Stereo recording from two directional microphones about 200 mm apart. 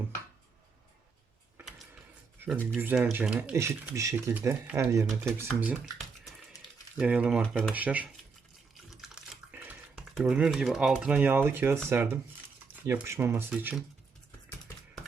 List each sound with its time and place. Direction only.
2.4 s a sound: 10° right (ahead or behind)
2.7 s speech: 10° right (ahead or behind)
7.0 s speech: 5° right (ahead or behind)